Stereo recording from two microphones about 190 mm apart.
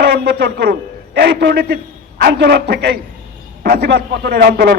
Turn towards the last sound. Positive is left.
turn(degrees=-55)  # may be behind; listen again after turning